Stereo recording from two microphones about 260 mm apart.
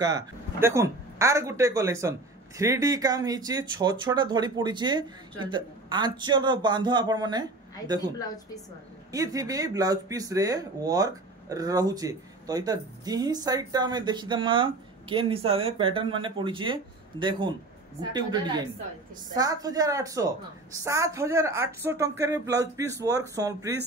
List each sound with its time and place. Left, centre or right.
0.0 s speech: centre
9.1 s speech: centre